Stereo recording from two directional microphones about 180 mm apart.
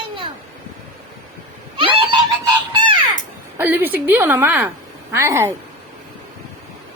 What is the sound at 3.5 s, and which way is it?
A woman's voice, 10° right (ahead or behind).